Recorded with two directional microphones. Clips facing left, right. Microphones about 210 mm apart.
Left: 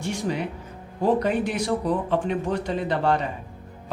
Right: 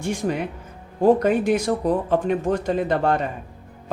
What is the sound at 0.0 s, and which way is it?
Speech, 50° right (ahead or behind).